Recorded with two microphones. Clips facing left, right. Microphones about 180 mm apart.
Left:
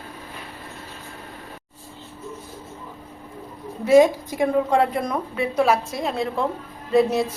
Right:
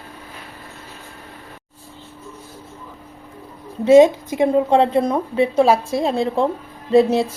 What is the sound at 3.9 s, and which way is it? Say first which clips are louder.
A woman's voice: right 4 dB; 25° right (ahead or behind).